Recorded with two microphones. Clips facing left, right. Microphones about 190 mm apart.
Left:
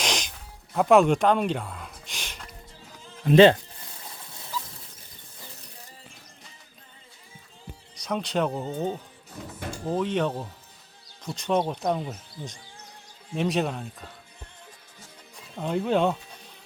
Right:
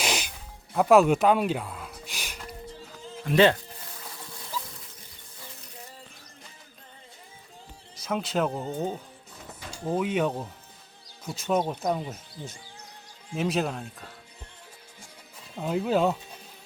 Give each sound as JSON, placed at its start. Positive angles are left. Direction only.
{"t": 0.0, "sound": "music", "side_deg": -10}
{"t": 3.2, "sound": "speech", "side_deg": 25}
{"t": 7.9, "sound": "speech", "side_deg": 0}
{"t": 9.6, "sound": "drawer open or close", "side_deg": 55}
{"t": 9.9, "sound": "speech", "side_deg": -10}
{"t": 15.5, "sound": "speech", "side_deg": -5}